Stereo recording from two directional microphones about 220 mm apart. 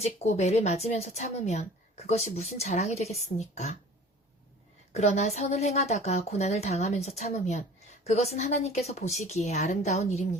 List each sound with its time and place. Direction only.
0.0 s a woman's voice: 30° left (ahead or behind)
4.9 s a woman's voice: 30° left (ahead or behind)